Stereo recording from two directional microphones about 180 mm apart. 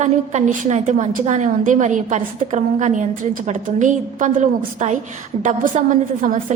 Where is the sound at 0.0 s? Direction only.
40° right (ahead or behind).